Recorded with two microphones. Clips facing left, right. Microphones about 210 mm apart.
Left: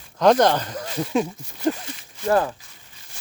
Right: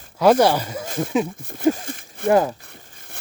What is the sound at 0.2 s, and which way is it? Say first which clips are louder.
Speech: right 1 dB; 5° right (ahead or behind).